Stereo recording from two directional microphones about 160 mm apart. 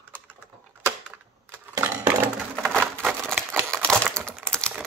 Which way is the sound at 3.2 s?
Centre (ahead or behind).